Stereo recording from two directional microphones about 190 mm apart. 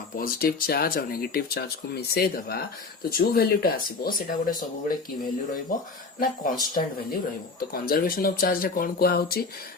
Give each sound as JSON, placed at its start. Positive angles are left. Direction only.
{"t": 0.2, "sound": "speech", "side_deg": 50}
{"t": 6.1, "sound": "speech", "side_deg": 50}